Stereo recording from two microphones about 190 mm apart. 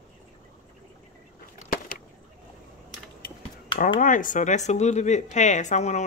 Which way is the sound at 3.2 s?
55° left (ahead or behind).